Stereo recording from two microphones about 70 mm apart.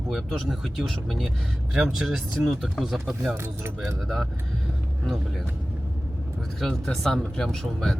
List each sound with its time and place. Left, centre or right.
0.1 s speech: centre
3.3 s speech: right
3.8 s speech: centre
6.6 s speech: centre